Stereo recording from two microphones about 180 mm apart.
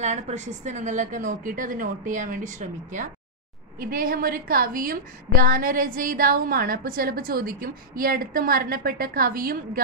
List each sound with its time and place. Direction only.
0.0 s a woman's voice: 40° right (ahead or behind)
3.8 s a woman's voice: 55° right (ahead or behind)